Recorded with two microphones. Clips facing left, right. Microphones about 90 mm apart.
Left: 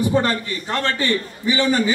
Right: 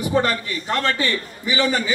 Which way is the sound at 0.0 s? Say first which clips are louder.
Left 1 dB; 35° left (ahead or behind).